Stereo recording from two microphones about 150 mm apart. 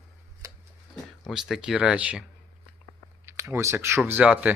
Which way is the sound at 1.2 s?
Centre (ahead or behind).